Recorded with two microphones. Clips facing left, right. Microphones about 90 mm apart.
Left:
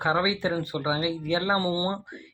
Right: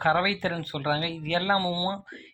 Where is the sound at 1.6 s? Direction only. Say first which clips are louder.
Left 2 dB; 25° left (ahead or behind).